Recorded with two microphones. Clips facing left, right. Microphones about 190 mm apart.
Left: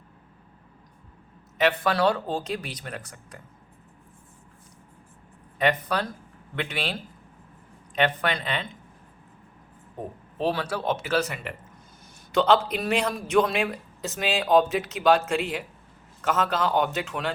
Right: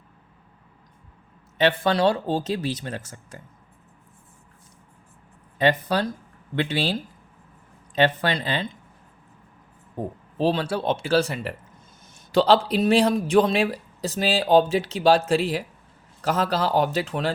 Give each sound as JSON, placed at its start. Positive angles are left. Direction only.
{"t": 1.5, "sound": "speech", "side_deg": -30}
{"t": 5.5, "sound": "speech", "side_deg": -30}
{"t": 7.9, "sound": "speech", "side_deg": -30}
{"t": 10.3, "sound": "speech", "side_deg": -30}